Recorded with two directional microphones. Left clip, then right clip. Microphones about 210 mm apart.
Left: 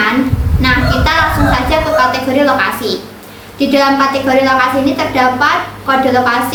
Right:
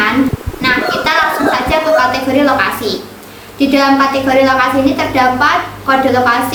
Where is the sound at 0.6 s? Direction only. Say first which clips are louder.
Even; 15° right (ahead or behind).